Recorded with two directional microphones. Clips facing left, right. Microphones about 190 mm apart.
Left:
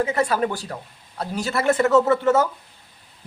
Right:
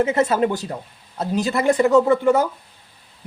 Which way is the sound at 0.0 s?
25° right (ahead or behind).